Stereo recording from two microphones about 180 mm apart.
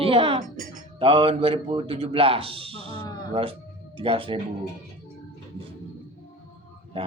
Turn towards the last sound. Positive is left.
turn(degrees=-30)  # may be behind; listen again after turning